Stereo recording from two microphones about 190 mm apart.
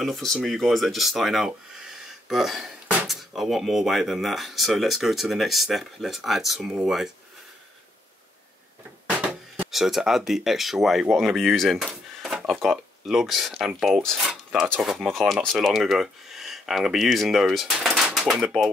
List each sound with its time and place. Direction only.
0.0 s speech: centre (ahead or behind)
9.1 s a sound: 5° right (ahead or behind)
9.7 s speech: centre (ahead or behind)